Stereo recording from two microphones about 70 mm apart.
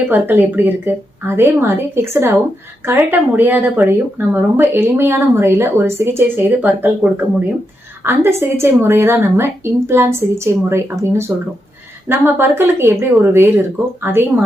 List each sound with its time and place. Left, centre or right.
0.1 s speech: right
8.0 s speech: right